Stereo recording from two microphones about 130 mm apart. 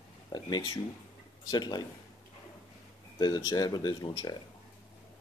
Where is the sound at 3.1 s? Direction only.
30° left (ahead or behind).